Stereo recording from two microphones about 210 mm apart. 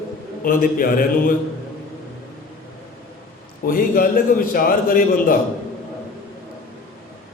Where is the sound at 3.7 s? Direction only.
40° left (ahead or behind).